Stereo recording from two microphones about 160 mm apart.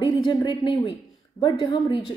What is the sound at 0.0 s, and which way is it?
Speech, 25° left (ahead or behind).